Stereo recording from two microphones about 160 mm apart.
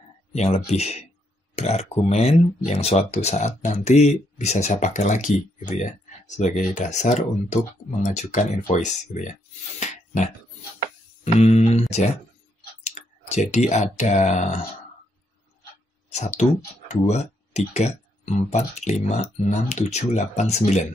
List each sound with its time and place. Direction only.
0.3 s speech: 40° left (ahead or behind)
9.8 s a sound: 45° left (ahead or behind)
11.3 s speech: 45° left (ahead or behind)
12.8 s speech: 45° left (ahead or behind)
16.1 s speech: 45° left (ahead or behind)